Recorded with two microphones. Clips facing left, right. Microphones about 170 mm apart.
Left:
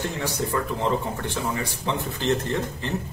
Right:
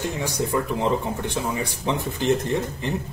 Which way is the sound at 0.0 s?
15° right (ahead or behind).